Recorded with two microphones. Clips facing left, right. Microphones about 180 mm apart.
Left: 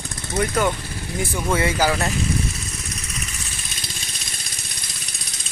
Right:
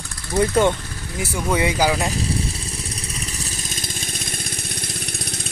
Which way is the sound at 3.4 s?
45° right (ahead or behind).